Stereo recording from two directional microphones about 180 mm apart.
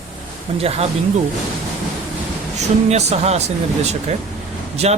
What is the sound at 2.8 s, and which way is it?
Speech, 35° right (ahead or behind).